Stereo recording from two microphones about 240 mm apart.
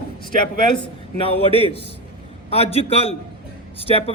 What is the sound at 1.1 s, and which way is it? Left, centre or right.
Speech, left.